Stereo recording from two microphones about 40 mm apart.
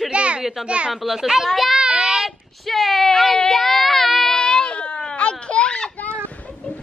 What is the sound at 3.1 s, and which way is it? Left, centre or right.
Baby cry, centre.